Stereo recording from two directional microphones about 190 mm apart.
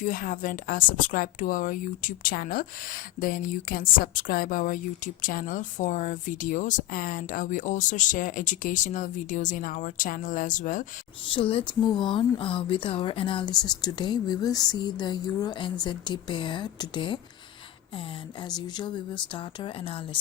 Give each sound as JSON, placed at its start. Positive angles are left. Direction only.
{"t": 0.0, "sound": "a woman's voice", "side_deg": 45}
{"t": 11.3, "sound": "speech", "side_deg": 25}